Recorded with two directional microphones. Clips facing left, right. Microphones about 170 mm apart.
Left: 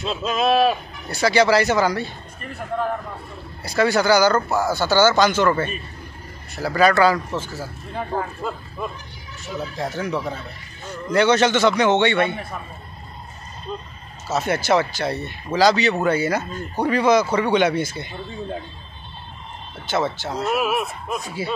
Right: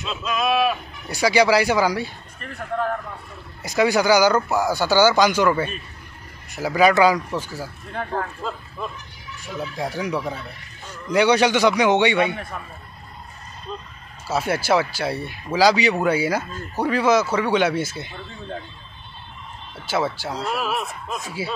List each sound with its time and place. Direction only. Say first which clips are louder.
0.0 s speech: left 3 dB; 30° left (ahead or behind)
1.0 s speech: even; 15° right (ahead or behind)
3.6 s speech: even; 15° right (ahead or behind)
7.9 s speech: left 1 dB; 5° left (ahead or behind)
9.8 s speech: even; 15° right (ahead or behind)
14.2 s speech: left 1 dB; 10° right (ahead or behind)
19.9 s speech: left 1 dB; 10° right (ahead or behind)
20.4 s speech: left 5 dB; 10° left (ahead or behind)